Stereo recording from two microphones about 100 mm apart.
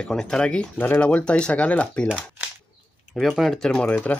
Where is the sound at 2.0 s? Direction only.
10° right (ahead or behind).